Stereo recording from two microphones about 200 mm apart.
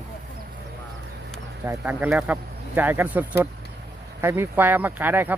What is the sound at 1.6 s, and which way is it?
Speech, 10° right (ahead or behind).